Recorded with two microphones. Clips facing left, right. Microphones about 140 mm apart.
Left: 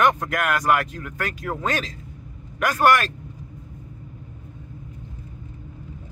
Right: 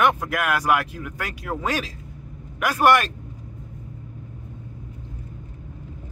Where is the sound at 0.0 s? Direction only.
5° right (ahead or behind).